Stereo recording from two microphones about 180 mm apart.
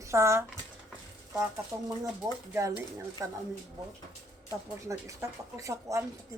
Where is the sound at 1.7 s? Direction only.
15° right (ahead or behind).